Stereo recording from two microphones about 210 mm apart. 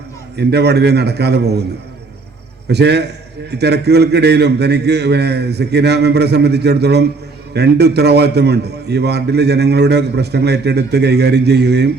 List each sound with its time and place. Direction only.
0.3 s a man's voice: 50° right (ahead or behind)
2.6 s a man's voice: 55° right (ahead or behind)